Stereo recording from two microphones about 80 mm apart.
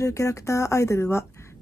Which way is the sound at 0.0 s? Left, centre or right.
Left.